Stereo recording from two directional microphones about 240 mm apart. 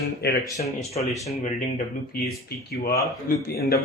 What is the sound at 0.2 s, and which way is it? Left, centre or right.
Speech, left.